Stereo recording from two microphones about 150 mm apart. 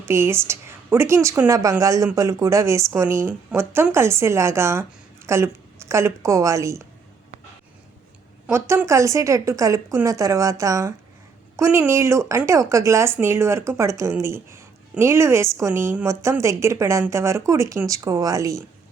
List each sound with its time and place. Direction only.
0.0 s a woman's voice: 15° right (ahead or behind)
8.4 s a woman's voice: 15° right (ahead or behind)